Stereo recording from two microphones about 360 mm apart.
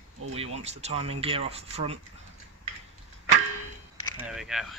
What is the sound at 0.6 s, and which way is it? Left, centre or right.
Speech, centre.